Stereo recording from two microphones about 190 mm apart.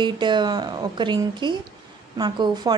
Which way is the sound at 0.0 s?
25° right (ahead or behind).